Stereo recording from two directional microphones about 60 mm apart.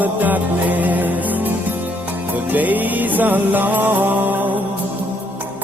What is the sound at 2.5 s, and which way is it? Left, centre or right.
Music, right.